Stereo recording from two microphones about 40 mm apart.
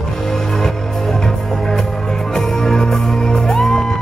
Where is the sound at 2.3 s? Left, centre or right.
Centre.